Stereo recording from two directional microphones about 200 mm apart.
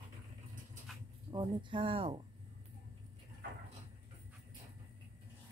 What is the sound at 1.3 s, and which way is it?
Speech, 20° right (ahead or behind).